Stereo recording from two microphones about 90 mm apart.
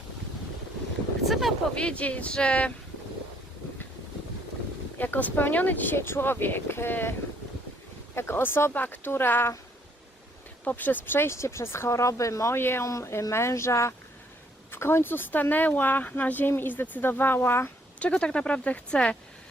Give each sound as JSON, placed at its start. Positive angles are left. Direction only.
{"t": 1.2, "sound": "boat", "side_deg": 0}
{"t": 1.7, "sound": "speech", "side_deg": 10}
{"t": 4.9, "sound": "speech", "side_deg": 20}
{"t": 10.6, "sound": "speech", "side_deg": 15}
{"t": 18.0, "sound": "speech", "side_deg": 10}